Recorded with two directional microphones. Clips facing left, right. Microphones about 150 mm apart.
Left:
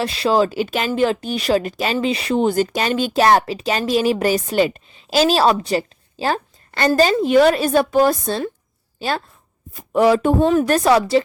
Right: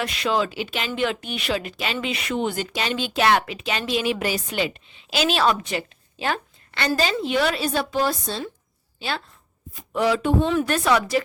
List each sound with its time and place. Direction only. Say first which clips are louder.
0.0 s speech: left 6 dB; 35° left (ahead or behind)